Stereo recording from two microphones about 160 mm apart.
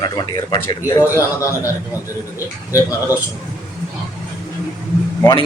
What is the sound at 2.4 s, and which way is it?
Speech, 20° left (ahead or behind).